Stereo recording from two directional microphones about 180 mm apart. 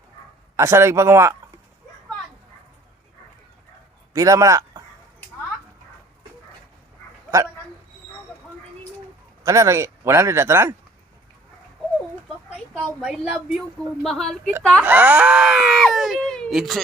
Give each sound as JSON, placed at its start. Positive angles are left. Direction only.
{"t": 0.5, "sound": "speech", "side_deg": -15}
{"t": 4.1, "sound": "a man's voice", "side_deg": -20}
{"t": 9.4, "sound": "speech", "side_deg": -15}
{"t": 12.5, "sound": "a woman's voice", "side_deg": -5}
{"t": 14.8, "sound": "a woman's voice", "side_deg": -10}